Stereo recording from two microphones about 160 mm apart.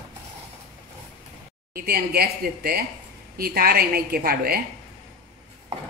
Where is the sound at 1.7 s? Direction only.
75° right (ahead or behind).